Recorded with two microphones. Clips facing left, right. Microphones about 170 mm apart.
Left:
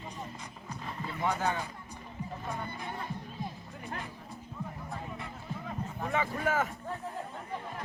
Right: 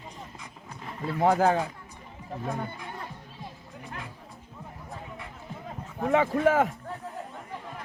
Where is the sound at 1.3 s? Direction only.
90° right.